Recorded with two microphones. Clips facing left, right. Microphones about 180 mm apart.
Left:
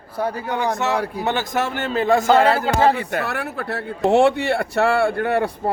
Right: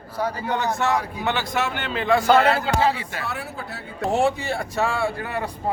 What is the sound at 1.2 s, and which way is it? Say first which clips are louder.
A man's voice: left 2 dB; 45° left (ahead or behind).